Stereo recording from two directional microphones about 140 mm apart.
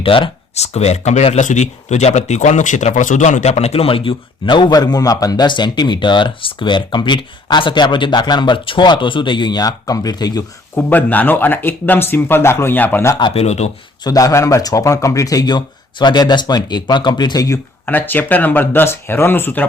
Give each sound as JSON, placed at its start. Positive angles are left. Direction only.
{"t": 0.0, "sound": "speech", "side_deg": 40}
{"t": 10.8, "sound": "speech", "side_deg": 15}
{"t": 13.1, "sound": "speech", "side_deg": 35}
{"t": 13.4, "sound": "speech", "side_deg": 50}
{"t": 14.0, "sound": "speech", "side_deg": 25}
{"t": 17.8, "sound": "speech", "side_deg": 15}